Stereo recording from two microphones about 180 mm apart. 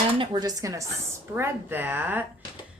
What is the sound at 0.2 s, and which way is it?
A woman's voice, 20° right (ahead or behind).